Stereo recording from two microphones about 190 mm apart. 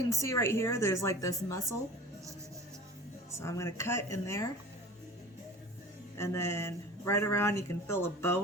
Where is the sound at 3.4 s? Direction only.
15° left (ahead or behind).